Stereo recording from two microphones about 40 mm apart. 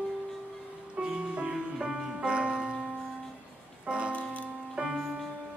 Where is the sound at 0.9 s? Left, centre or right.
Right.